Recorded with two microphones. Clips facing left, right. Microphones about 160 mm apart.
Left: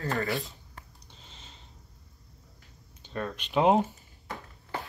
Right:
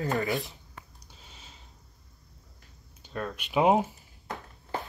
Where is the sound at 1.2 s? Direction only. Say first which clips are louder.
Even; 5° right (ahead or behind).